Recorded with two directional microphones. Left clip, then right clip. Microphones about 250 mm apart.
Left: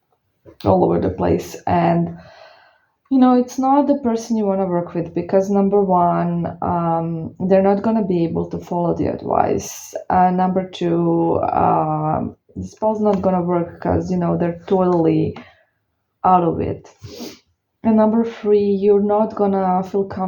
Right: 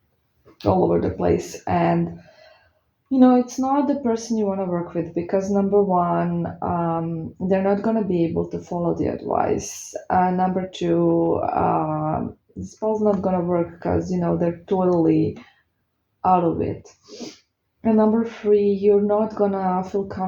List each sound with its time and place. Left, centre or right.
0.6 s speech: left
3.1 s speech: left
16.2 s speech: left
17.1 s sneeze: left
17.8 s speech: left